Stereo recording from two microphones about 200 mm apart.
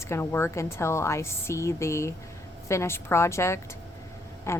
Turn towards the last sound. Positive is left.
turn(degrees=15)  # may be behind; listen again after turning